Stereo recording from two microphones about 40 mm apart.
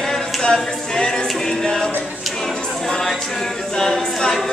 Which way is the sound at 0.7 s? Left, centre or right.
Centre.